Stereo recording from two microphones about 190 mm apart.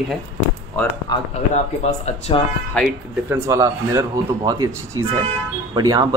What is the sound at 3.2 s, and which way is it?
Speech, 15° right (ahead or behind).